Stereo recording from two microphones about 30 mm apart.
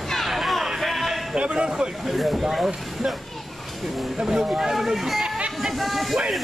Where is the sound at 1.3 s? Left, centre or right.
Right.